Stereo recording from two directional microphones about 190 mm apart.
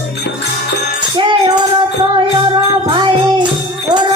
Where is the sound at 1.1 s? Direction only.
25° right (ahead or behind).